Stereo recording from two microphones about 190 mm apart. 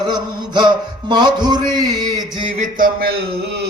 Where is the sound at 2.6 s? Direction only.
45° right (ahead or behind).